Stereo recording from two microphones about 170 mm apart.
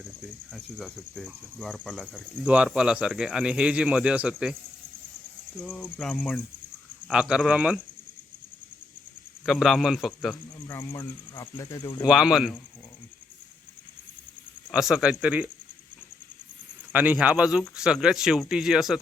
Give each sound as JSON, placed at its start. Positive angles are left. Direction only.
{"t": 0.5, "sound": "speech", "side_deg": 5}
{"t": 2.5, "sound": "speech", "side_deg": -5}
{"t": 5.6, "sound": "speech", "side_deg": 5}
{"t": 7.1, "sound": "speech", "side_deg": -5}
{"t": 9.5, "sound": "speech", "side_deg": 0}
{"t": 10.7, "sound": "speech", "side_deg": 15}
{"t": 12.0, "sound": "speech", "side_deg": -5}
{"t": 14.7, "sound": "speech", "side_deg": 0}
{"t": 16.9, "sound": "speech", "side_deg": -10}